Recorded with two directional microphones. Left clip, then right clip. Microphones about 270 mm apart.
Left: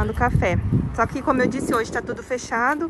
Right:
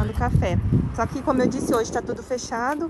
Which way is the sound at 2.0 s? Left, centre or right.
Centre.